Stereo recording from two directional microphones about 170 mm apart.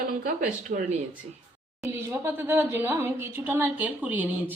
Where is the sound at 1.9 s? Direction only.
15° right (ahead or behind).